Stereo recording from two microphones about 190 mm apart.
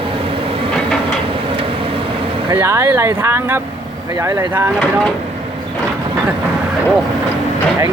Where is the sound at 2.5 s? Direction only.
15° right (ahead or behind).